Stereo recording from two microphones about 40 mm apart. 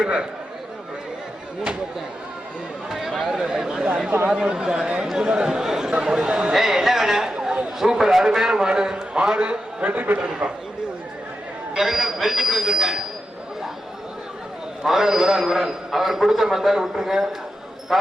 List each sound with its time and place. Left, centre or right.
0.0 s speech: right
2.9 s a man's voice: centre; by 6.5 s right
6.5 s a man's voice: centre; by 9.9 s right
9.9 s a man's voice: right
11.7 s a man's voice: centre
14.8 s a man's voice: centre